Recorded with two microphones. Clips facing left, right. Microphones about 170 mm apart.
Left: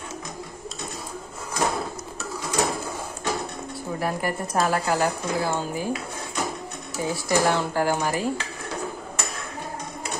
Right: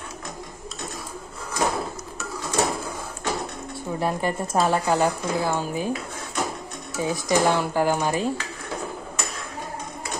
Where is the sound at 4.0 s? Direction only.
25° right (ahead or behind).